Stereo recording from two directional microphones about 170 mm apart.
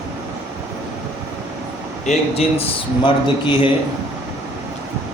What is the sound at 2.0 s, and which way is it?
A man's voice, 35° left (ahead or behind).